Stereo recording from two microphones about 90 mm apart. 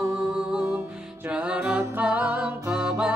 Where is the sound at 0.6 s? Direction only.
25° right (ahead or behind).